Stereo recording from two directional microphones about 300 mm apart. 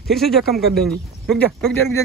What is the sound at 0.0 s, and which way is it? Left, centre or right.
Speech, centre.